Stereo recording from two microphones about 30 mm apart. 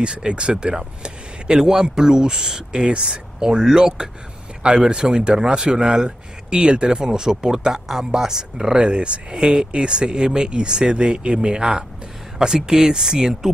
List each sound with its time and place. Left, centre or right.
0.0 s speech: right
1.6 s speech: centre
3.4 s speech: right
5.2 s speech: right
7.1 s speech: centre